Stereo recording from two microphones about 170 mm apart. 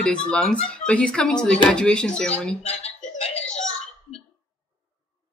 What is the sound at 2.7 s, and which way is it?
Music, 35° left (ahead or behind).